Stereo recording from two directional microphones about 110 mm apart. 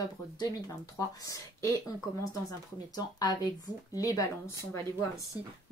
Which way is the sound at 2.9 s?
35° left (ahead or behind).